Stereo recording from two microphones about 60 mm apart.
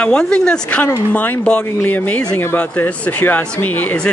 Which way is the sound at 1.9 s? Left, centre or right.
Left.